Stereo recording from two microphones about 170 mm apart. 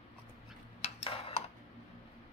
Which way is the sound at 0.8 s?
35° left (ahead or behind).